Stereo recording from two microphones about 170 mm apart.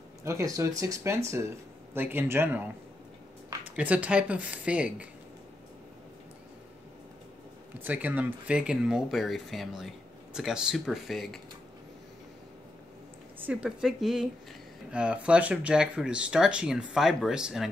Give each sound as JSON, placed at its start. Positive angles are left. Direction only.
{"t": 0.2, "sound": "speech", "side_deg": -20}
{"t": 7.8, "sound": "speech", "side_deg": -10}
{"t": 13.4, "sound": "speech", "side_deg": -5}